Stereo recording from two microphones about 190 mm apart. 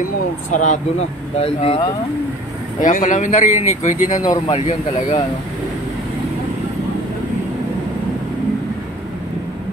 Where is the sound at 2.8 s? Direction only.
45° left (ahead or behind).